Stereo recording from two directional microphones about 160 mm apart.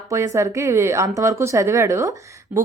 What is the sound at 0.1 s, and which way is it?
A woman's voice, 20° right (ahead or behind).